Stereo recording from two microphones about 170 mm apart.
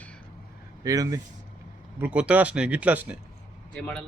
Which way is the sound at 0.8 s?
20° right (ahead or behind).